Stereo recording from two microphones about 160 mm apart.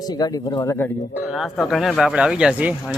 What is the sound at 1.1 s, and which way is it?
Speech, 5° right (ahead or behind).